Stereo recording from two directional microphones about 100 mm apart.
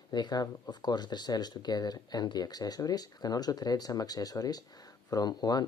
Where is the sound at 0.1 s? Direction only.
45° left (ahead or behind).